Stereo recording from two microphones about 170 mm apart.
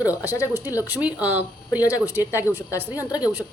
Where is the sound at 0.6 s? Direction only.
20° left (ahead or behind).